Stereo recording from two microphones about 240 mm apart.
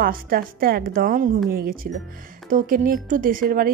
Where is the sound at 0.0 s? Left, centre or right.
Right.